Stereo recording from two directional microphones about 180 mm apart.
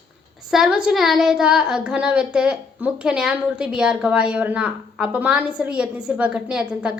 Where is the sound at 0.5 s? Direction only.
5° right (ahead or behind).